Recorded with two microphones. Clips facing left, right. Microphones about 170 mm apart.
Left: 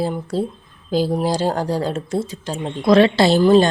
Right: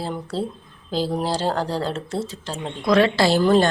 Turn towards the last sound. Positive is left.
turn(degrees=15)  # may be behind; listen again after turning